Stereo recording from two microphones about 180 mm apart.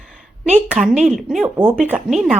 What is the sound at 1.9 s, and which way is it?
Speech, 5° right (ahead or behind).